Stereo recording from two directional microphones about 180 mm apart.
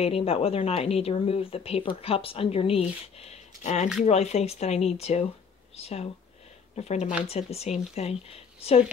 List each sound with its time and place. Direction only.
0.0 s speech: 35° left (ahead or behind)